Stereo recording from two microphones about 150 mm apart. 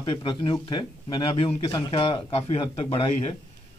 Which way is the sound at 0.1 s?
35° left (ahead or behind).